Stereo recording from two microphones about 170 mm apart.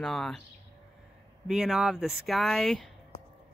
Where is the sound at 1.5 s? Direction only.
5° right (ahead or behind).